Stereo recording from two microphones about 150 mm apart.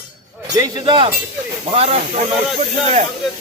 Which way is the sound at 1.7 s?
45° right (ahead or behind).